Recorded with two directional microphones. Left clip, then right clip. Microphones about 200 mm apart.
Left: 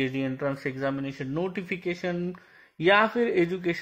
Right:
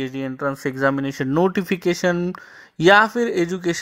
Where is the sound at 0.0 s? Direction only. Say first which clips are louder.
Right 4 dB; 30° right (ahead or behind).